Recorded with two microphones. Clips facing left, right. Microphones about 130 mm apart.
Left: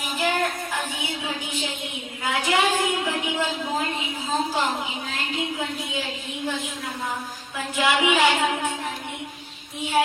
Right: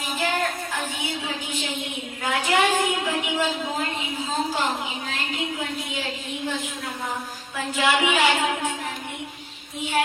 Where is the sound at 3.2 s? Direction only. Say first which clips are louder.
Right 1 dB; 15° right (ahead or behind).